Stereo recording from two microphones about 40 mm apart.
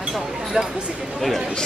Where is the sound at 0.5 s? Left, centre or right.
Right.